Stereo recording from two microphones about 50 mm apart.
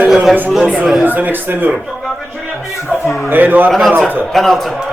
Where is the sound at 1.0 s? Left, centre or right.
Right.